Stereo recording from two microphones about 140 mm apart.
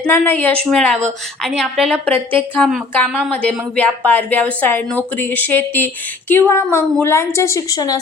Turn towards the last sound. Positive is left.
turn(degrees=25)  # may be behind; listen again after turning